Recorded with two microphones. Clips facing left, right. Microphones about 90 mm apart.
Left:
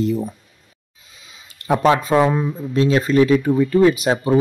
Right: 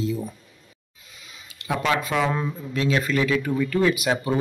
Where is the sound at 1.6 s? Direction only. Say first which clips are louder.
Left 8 dB; 35° left (ahead or behind).